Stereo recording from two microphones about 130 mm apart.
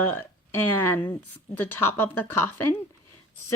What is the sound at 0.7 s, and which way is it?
A woman's voice, 15° left (ahead or behind).